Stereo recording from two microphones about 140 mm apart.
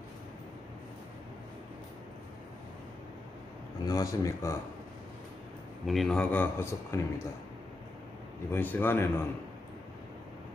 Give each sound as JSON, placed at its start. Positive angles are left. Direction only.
{"t": 3.8, "sound": "speech", "side_deg": 25}
{"t": 5.9, "sound": "speech", "side_deg": 5}
{"t": 8.5, "sound": "speech", "side_deg": 15}